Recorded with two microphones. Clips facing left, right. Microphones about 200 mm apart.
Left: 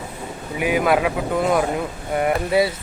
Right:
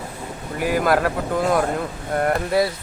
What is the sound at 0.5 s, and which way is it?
Speech, 5° left (ahead or behind).